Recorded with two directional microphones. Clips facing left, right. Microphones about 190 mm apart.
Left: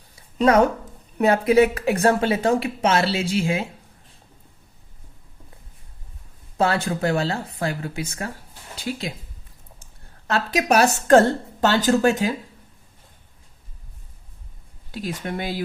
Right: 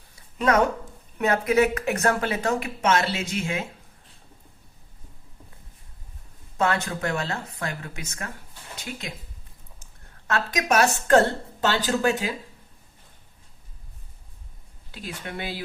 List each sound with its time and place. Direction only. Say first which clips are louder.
0.3 s speech: left 5 dB; 35° left (ahead or behind)
6.6 s speech: left 4 dB; 30° left (ahead or behind)
10.2 s speech: left 4 dB; 35° left (ahead or behind)
14.9 s speech: left 6 dB; 40° left (ahead or behind)